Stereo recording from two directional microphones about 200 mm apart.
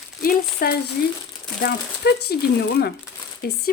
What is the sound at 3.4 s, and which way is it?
Speech, 50° left (ahead or behind).